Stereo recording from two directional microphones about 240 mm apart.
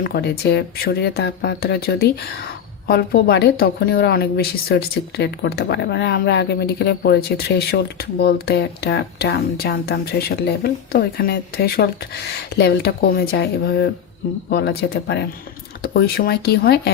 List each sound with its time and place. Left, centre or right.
0.0 s speech: left